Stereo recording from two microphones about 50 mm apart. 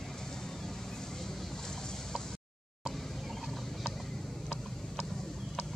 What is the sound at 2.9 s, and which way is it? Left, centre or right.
Turkey, centre.